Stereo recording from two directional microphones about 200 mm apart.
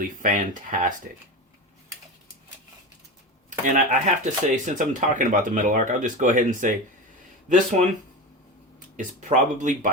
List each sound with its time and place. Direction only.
0.0 s speech: 40° right (ahead or behind)
3.7 s speech: 35° right (ahead or behind)
9.6 s speech: 40° right (ahead or behind)